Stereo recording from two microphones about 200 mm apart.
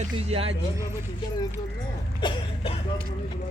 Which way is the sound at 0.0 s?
30° right (ahead or behind).